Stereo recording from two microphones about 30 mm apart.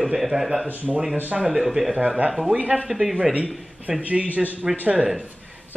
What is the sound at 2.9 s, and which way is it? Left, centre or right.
Speech, centre.